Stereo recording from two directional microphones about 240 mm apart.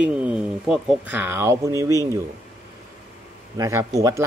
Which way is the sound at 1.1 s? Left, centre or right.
Centre.